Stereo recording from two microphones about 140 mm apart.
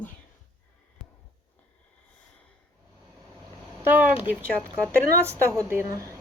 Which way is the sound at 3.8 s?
10° right (ahead or behind).